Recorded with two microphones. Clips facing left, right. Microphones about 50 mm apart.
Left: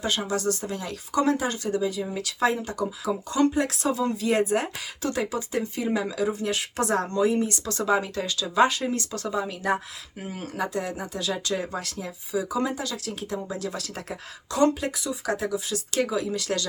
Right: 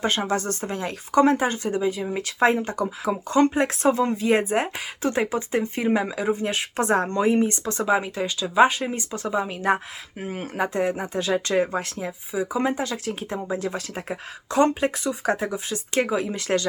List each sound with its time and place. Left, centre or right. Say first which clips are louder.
0.0 s speech: right 2 dB; right